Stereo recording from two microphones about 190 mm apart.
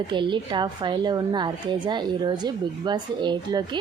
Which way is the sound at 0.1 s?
25° right (ahead or behind).